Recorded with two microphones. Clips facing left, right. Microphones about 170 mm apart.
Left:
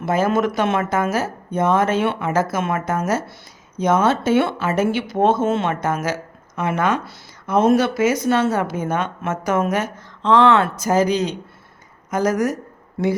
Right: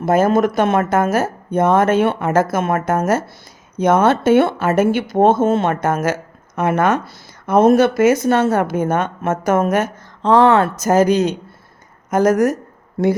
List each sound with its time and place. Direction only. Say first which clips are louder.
0.0 s speech: right 4 dB; 45° right (ahead or behind)